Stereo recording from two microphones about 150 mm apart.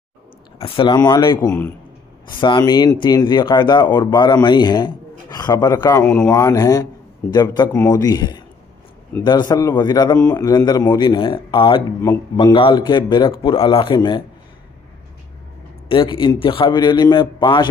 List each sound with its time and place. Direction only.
0.6 s speech: 35° left (ahead or behind)
1.5 s a man's voice: 10° left (ahead or behind)
2.2 s speech: 30° left (ahead or behind)
6.0 s speech: 15° left (ahead or behind)
11.1 s speech: 35° left (ahead or behind)
15.9 s speech: 35° left (ahead or behind)